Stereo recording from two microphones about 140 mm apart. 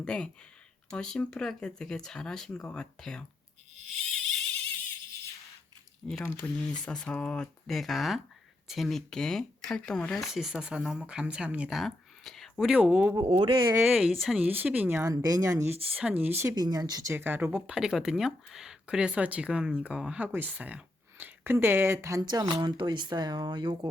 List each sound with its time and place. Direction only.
0.0 s speech: 5° left (ahead or behind)
6.1 s speech: 5° left (ahead or behind)
13.2 s speech: 40° right (ahead or behind)
13.9 s speech: centre (ahead or behind)
15.1 s speech: 25° right (ahead or behind)
15.7 s speech: 45° right (ahead or behind)
16.0 s speech: 10° right (ahead or behind)
16.4 s speech: 25° right (ahead or behind)
17.2 s speech: 15° right (ahead or behind); by 23.9 s 30° right (ahead or behind)